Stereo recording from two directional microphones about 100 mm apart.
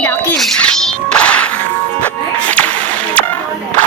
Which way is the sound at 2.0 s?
15° left (ahead or behind).